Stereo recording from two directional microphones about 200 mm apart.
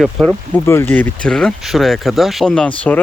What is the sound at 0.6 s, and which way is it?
Speech, 10° left (ahead or behind).